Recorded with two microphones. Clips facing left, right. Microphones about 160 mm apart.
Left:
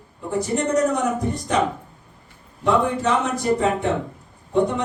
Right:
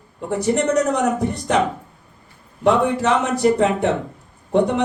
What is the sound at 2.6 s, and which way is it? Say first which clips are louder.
Speech: right 3 dB; 70° right (ahead or behind).